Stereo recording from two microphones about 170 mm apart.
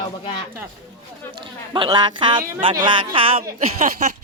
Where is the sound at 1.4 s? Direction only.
30° right (ahead or behind).